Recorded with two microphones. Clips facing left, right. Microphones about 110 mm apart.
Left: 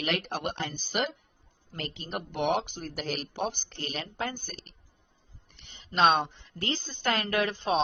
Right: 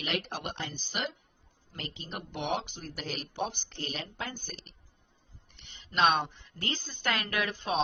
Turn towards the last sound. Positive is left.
turn(degrees=30)  # may be behind; listen again after turning